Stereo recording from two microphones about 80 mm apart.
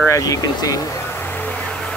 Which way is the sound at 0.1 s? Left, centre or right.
Left.